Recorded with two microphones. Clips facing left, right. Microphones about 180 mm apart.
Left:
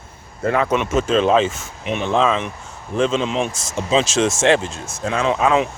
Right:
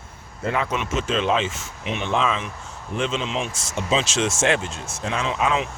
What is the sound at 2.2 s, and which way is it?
Speech, 35° left (ahead or behind).